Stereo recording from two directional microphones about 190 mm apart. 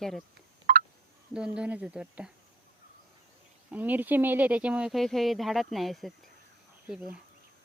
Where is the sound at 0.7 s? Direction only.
50° right (ahead or behind).